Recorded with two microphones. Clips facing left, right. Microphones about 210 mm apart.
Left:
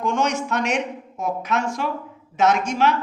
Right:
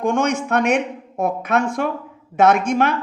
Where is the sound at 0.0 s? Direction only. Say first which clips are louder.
Right 3 dB; 55° right (ahead or behind).